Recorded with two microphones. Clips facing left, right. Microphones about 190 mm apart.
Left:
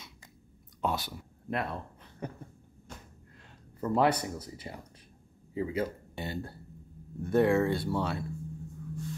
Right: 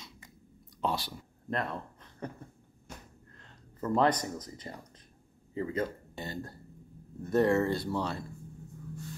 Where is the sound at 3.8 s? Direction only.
10° left (ahead or behind).